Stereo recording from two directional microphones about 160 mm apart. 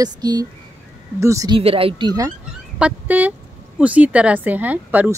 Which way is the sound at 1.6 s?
35° right (ahead or behind).